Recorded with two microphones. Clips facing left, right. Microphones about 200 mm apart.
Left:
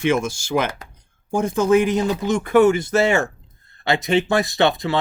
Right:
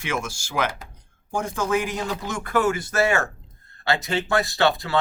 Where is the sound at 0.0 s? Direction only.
25° left (ahead or behind).